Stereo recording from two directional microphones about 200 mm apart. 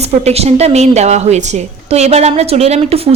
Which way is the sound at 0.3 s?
30° right (ahead or behind).